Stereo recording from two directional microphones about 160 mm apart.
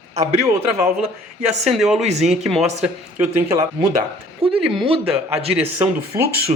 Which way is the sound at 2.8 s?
15° right (ahead or behind).